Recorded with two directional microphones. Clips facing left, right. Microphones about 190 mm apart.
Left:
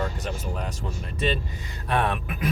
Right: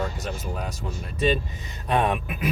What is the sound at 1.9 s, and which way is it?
Speech, 15° right (ahead or behind).